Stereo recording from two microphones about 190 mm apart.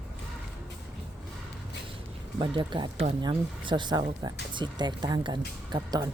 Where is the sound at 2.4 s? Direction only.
25° right (ahead or behind).